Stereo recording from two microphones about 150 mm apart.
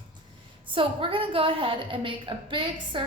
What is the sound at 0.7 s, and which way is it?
A woman's voice, 35° right (ahead or behind).